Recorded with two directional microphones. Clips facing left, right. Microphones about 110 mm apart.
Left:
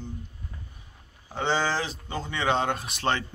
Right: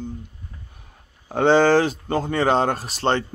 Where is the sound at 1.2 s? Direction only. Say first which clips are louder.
Right 11 dB; 55° right (ahead or behind).